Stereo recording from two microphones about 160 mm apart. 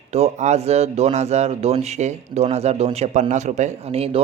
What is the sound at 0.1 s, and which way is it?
A man's voice, 45° right (ahead or behind).